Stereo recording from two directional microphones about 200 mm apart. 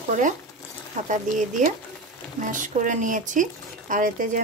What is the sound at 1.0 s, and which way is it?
Speech, 40° right (ahead or behind).